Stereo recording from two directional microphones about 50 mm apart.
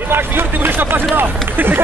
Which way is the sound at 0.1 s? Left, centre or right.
Right.